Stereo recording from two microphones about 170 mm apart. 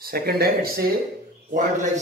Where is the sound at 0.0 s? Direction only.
65° right (ahead or behind).